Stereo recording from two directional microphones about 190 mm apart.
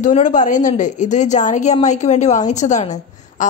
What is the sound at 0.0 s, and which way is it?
Speech, 40° left (ahead or behind).